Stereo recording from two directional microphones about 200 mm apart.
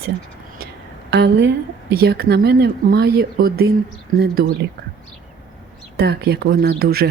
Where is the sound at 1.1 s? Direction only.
55° right (ahead or behind).